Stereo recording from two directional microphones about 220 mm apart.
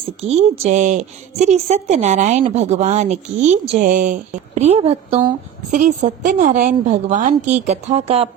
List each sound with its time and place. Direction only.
0.2 s a woman's voice: 30° right (ahead or behind)